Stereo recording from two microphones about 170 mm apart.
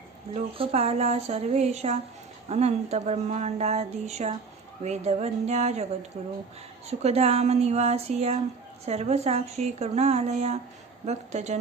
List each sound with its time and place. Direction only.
0.3 s speech: 35° right (ahead or behind)